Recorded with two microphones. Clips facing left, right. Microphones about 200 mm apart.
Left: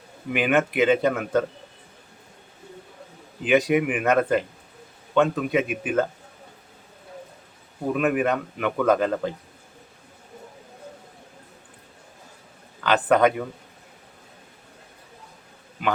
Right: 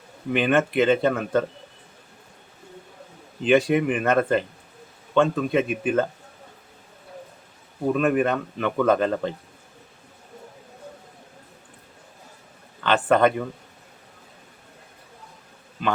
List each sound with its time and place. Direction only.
0.3 s speech: 10° left (ahead or behind)
3.4 s speech: 10° left (ahead or behind)
7.9 s speech: 10° left (ahead or behind)
12.8 s speech: 10° left (ahead or behind)